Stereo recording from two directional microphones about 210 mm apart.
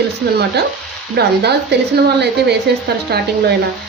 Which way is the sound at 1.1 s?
50° right (ahead or behind).